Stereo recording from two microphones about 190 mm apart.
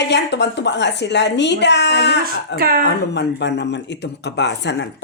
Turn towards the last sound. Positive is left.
turn(degrees=65)  # may be behind; listen again after turning